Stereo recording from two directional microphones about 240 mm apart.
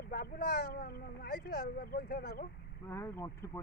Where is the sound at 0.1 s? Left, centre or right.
Left.